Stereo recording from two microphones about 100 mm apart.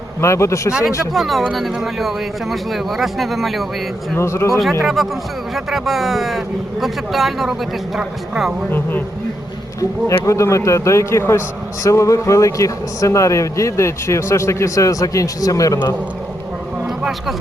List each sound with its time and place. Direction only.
0.2 s a man's voice: 30° left (ahead or behind)
0.7 s a man's voice: 5° right (ahead or behind)
4.2 s a man's voice: 30° left (ahead or behind)
5.0 s a man's voice: centre (ahead or behind)
8.7 s a man's voice: 20° left (ahead or behind)
10.1 s a man's voice: 30° left (ahead or behind)
17.0 s speech: 5° right (ahead or behind)